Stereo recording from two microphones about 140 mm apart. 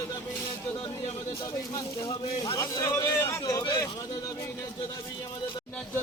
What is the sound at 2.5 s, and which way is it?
A man's voice, 20° left (ahead or behind).